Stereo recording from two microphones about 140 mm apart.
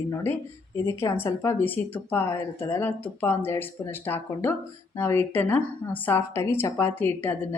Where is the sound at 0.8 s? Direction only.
20° left (ahead or behind).